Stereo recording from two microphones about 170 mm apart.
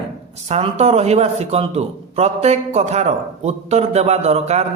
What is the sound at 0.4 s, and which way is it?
A man's voice, 40° right (ahead or behind).